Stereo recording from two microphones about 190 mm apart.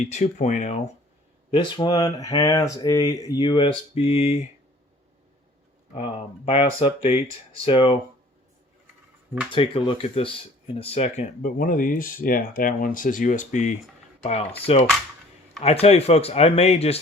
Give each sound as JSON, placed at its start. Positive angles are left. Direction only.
{"t": 0.0, "sound": "speech", "side_deg": 35}
{"t": 1.5, "sound": "speech", "side_deg": 25}
{"t": 5.9, "sound": "speech", "side_deg": 30}
{"t": 9.5, "sound": "speech", "side_deg": 25}